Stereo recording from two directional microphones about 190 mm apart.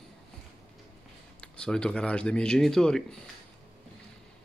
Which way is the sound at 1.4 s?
5° left (ahead or behind).